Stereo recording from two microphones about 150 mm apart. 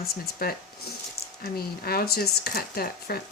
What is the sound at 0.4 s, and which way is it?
Speech, 90° left.